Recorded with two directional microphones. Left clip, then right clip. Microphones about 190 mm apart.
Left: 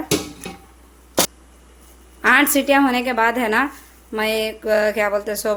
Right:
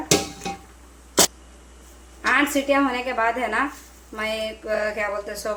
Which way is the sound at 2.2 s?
60° left (ahead or behind).